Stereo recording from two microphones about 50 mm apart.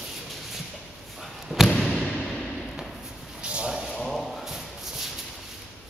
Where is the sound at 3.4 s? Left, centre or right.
Right.